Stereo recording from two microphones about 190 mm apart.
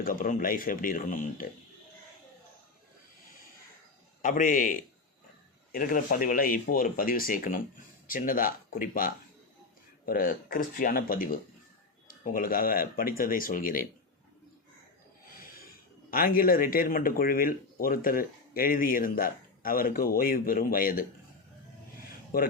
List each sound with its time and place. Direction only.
0.0 s a man's voice: 50° left (ahead or behind)
4.2 s a man's voice: 45° left (ahead or behind)
15.3 s a sound: 50° left (ahead or behind)
16.0 s a man's voice: 50° left (ahead or behind)
22.3 s a man's voice: 50° left (ahead or behind)